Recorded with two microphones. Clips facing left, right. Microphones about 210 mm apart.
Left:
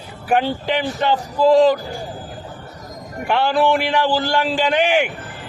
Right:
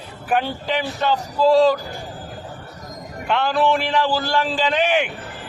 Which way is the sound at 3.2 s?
10° left (ahead or behind).